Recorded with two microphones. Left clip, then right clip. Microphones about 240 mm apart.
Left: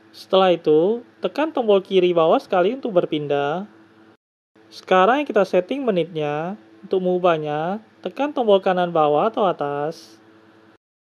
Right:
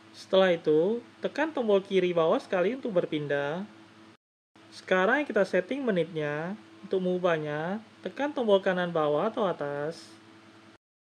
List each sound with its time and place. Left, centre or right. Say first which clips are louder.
0.1 s speech: left 7 dB; left
4.7 s speech: left 9 dB; left